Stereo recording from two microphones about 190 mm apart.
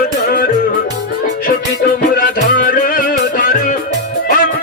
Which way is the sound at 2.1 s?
45° left (ahead or behind).